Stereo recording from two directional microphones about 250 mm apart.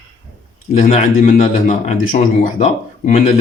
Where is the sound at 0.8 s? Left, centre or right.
Left.